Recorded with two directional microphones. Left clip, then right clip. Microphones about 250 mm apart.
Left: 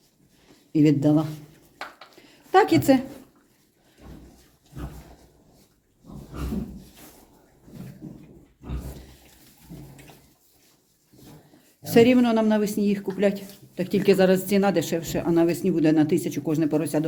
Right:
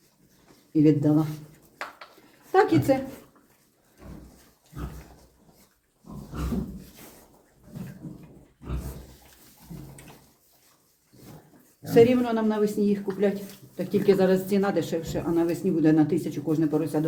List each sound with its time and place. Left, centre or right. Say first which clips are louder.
0.7 s speech: left 1 dB; left
2.5 s a sound: left 3 dB; left
11.8 s speech: left 1 dB; left